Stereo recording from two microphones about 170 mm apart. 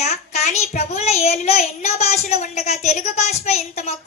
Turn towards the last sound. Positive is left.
turn(degrees=40)  # may be behind; listen again after turning